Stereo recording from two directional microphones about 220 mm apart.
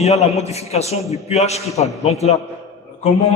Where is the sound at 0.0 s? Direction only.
30° left (ahead or behind).